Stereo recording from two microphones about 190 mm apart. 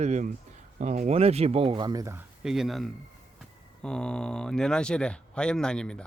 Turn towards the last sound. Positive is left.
turn(degrees=5)  # may be behind; listen again after turning